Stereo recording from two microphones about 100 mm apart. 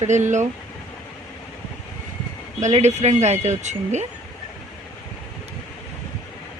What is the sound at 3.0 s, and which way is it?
Speech, 90° right.